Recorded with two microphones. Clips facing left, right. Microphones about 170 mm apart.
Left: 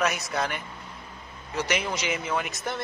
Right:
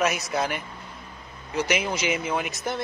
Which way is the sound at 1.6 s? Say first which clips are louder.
Right 3 dB; centre (ahead or behind).